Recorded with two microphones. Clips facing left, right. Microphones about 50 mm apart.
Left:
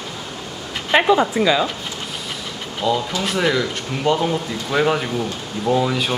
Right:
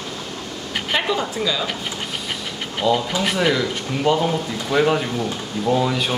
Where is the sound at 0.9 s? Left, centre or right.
Left.